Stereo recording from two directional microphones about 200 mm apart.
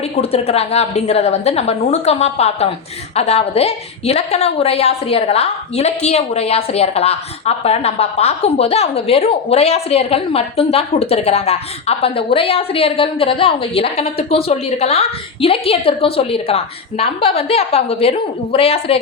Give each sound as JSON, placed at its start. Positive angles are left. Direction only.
{"t": 0.2, "sound": "a woman's voice", "side_deg": 30}